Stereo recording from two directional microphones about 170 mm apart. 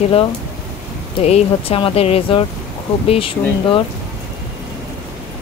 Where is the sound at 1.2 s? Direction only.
35° left (ahead or behind).